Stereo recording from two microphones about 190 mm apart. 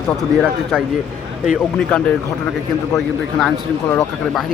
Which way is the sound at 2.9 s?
Centre (ahead or behind).